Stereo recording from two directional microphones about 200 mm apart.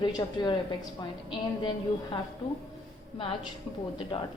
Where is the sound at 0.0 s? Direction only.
20° left (ahead or behind).